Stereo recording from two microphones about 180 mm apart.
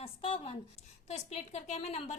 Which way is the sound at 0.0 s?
30° left (ahead or behind).